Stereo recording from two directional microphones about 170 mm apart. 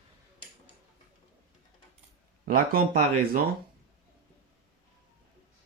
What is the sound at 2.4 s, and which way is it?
Speech, 60° right (ahead or behind).